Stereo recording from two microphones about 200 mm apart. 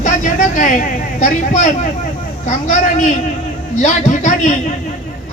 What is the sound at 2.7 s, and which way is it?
A man's voice, 40° left (ahead or behind).